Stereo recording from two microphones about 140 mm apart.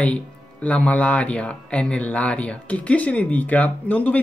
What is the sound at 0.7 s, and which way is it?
Speech, 10° left (ahead or behind).